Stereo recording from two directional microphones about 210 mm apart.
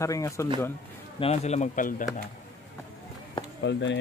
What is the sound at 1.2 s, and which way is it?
Speech, 30° left (ahead or behind).